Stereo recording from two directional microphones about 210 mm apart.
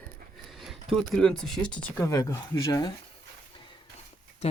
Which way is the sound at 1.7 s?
15° left (ahead or behind).